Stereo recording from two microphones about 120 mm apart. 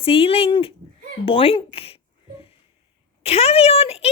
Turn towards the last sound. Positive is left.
turn(degrees=55)  # may be behind; listen again after turning